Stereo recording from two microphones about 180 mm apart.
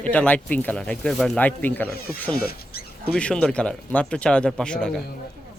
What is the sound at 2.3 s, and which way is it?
Rodents, 60° left (ahead or behind).